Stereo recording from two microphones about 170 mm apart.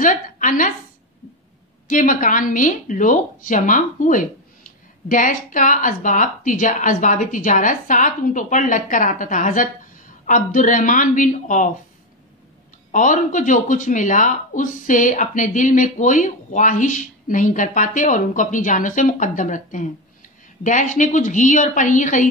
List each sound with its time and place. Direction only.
0.0 s a woman's voice: 50° left (ahead or behind)
1.9 s speech: 55° left (ahead or behind)
12.9 s speech: 50° left (ahead or behind)